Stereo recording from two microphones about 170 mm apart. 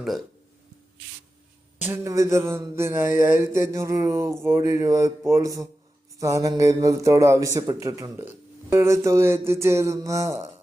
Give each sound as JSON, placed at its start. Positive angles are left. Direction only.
{"t": 1.8, "sound": "mantra", "side_deg": -15}
{"t": 6.1, "sound": "speech", "side_deg": -20}
{"t": 8.7, "sound": "mantra", "side_deg": -15}